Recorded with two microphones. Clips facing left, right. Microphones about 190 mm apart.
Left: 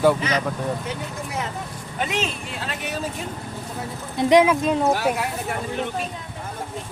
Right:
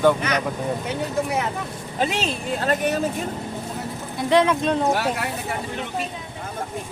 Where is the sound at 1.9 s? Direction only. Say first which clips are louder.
Right 2 dB; 30° right (ahead or behind); by 3.0 s 50° right (ahead or behind).